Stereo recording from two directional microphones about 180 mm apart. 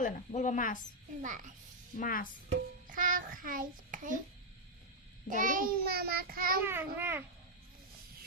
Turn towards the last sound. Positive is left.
turn(degrees=-10)  # may be behind; listen again after turning